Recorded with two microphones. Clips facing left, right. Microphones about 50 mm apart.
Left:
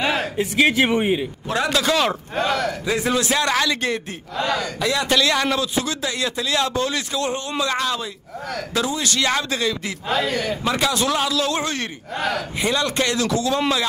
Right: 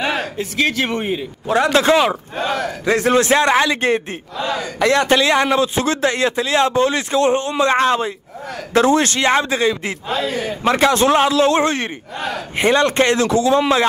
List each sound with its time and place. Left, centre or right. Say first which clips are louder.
0.0 s a sound: right 1 dB; centre
0.4 s a man's voice: left 4 dB; centre
1.7 s a man's voice: right 6 dB; right
2.0 s a man's voice: right 4 dB; centre
2.9 s a man's voice: right 8 dB; right
4.7 s speech: right 7 dB; right
5.1 s a man's voice: right 5 dB; right
9.1 s a man's voice: right 5 dB; right
12.5 s a man's voice: right 10 dB; right